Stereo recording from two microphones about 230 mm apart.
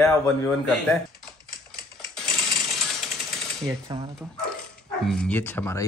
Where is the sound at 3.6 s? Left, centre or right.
Centre.